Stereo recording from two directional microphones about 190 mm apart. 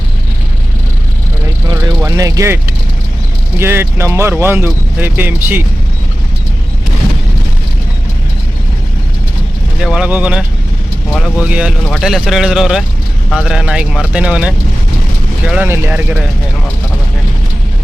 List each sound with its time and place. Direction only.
1.7 s vehicle: 20° right (ahead or behind)
3.6 s speech: 10° right (ahead or behind)
9.8 s speech: 5° right (ahead or behind)